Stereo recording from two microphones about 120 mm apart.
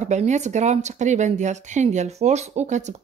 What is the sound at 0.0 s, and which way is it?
Speech, 75° right (ahead or behind).